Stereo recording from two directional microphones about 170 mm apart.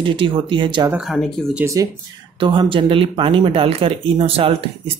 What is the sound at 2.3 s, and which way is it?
Speech, 30° right (ahead or behind).